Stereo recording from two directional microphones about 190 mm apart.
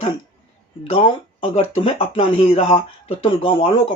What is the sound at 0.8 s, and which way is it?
Speech, 30° left (ahead or behind).